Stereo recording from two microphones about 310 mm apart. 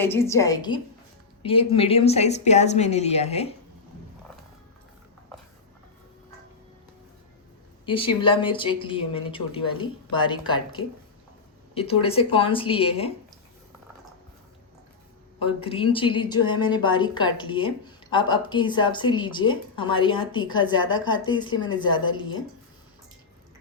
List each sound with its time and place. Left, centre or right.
0.0 s a woman's voice: centre
7.9 s a woman's voice: centre
15.4 s a woman's voice: centre